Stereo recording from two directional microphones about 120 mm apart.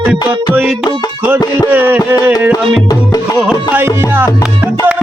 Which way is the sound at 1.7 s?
15° right (ahead or behind).